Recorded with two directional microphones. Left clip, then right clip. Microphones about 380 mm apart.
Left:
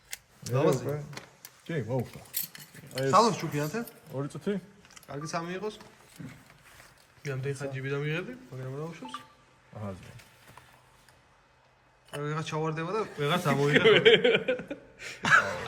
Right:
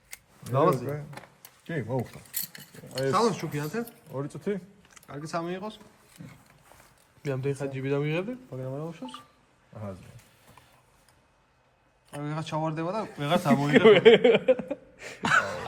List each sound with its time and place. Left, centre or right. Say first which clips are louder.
0.4 s speech: right 3 dB; centre
3.1 s speech: left 3 dB; centre
4.1 s speech: right 1 dB; centre
4.9 s speech: right 1 dB; centre
7.2 s speech: right 4 dB; centre
12.1 s speech: even; centre
13.7 s a man's voice: right 4 dB; right
15.2 s gasp: left 1 dB; centre